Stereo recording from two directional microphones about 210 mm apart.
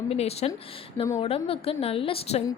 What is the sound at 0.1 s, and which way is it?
A woman's voice, 30° left (ahead or behind).